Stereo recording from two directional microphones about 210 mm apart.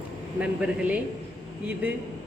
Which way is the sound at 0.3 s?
5° right (ahead or behind).